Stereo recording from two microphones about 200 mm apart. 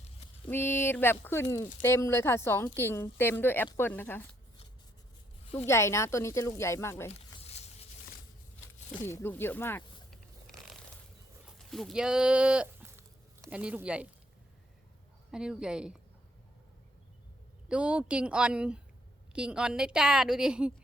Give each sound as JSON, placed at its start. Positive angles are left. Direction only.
{"t": 0.5, "sound": "speech", "side_deg": 10}
{"t": 5.6, "sound": "speech", "side_deg": 15}
{"t": 7.4, "sound": "a sound", "side_deg": 30}
{"t": 8.9, "sound": "speech", "side_deg": 10}
{"t": 10.1, "sound": "biting", "side_deg": 0}
{"t": 11.4, "sound": "a woman's voice", "side_deg": 0}
{"t": 15.3, "sound": "a woman's voice", "side_deg": -5}
{"t": 17.7, "sound": "a woman's voice", "side_deg": -5}